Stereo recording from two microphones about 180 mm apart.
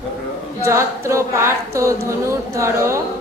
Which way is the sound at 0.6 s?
15° right (ahead or behind).